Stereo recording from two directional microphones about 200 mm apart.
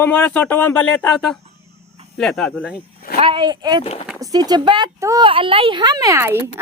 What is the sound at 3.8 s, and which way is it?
Speech, 30° left (ahead or behind).